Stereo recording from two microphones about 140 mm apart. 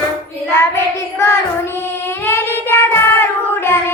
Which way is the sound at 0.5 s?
20° left (ahead or behind).